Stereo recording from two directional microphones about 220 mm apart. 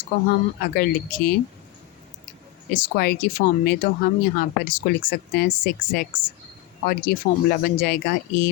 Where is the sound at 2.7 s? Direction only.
40° left (ahead or behind).